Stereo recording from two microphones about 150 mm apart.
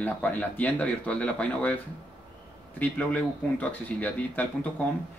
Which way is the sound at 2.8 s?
10° left (ahead or behind).